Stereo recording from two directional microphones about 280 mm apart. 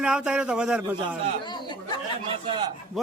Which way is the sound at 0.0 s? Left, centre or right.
Centre.